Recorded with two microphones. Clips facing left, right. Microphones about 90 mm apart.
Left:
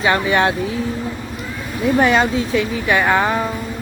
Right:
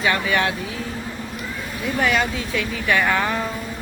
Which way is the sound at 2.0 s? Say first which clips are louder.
Left 5 dB; 35° left (ahead or behind).